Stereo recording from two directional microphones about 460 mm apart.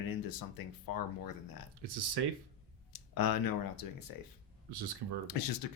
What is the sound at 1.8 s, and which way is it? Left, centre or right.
Speech, right.